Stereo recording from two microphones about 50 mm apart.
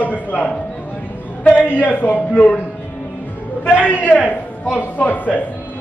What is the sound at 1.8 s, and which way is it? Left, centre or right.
Speech, left.